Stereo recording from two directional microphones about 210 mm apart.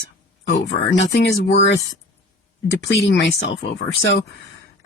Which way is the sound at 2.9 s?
55° left (ahead or behind).